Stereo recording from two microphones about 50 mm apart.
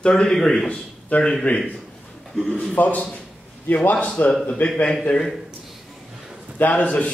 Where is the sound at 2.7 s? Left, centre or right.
Left.